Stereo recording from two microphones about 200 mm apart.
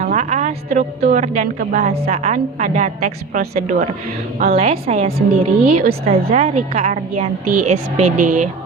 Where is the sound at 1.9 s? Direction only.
30° right (ahead or behind).